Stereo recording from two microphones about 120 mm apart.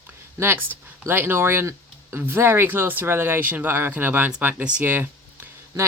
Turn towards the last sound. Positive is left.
turn(degrees=-15)  # may be behind; listen again after turning